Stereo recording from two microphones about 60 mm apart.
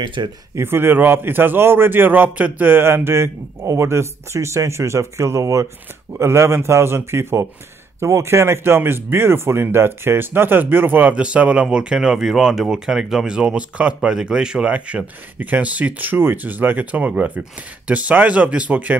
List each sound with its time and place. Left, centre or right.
0.6 s speech: right
6.1 s speech: right
11.1 s speech: centre